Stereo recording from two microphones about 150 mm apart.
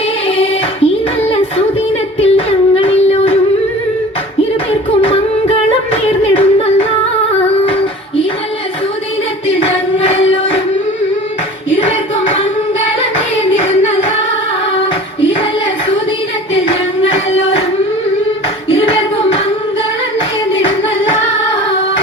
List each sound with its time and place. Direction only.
0.3 s music: 40° left (ahead or behind)
4.9 s singing: 40° left (ahead or behind)
7.6 s child singing: 40° left (ahead or behind)
9.6 s music: 40° left (ahead or behind)
11.9 s hands: 40° left (ahead or behind)
16.6 s music: 40° left (ahead or behind)
18.7 s hands: 40° left (ahead or behind)